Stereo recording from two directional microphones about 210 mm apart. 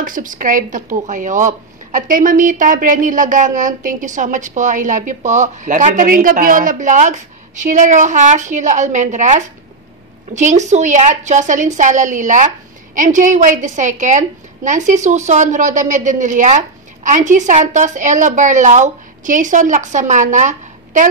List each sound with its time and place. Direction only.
0.0 s a woman's voice: 40° right (ahead or behind)